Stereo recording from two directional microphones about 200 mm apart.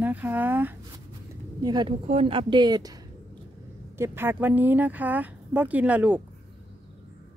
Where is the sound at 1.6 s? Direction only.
20° right (ahead or behind).